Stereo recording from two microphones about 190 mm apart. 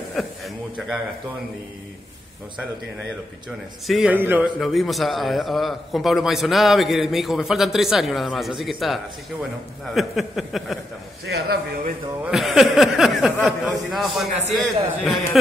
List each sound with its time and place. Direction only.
0.2 s a man's voice: centre (ahead or behind)
3.8 s a man's voice: centre (ahead or behind)
11.2 s speech: 55° right (ahead or behind)
12.3 s a man's voice: centre (ahead or behind)